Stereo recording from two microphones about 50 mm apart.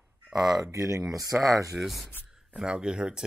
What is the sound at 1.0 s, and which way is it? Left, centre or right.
Speech, centre.